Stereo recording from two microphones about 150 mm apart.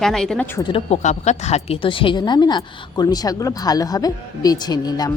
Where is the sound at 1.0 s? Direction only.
50° left (ahead or behind).